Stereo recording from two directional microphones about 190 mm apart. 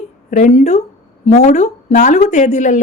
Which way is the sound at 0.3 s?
40° left (ahead or behind).